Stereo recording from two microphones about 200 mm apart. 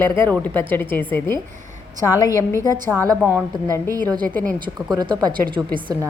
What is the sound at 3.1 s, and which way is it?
A woman's voice, 10° right (ahead or behind).